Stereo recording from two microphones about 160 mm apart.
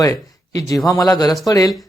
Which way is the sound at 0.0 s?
20° left (ahead or behind).